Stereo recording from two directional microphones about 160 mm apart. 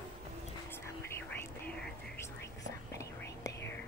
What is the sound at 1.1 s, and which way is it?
Whispering, 10° left (ahead or behind).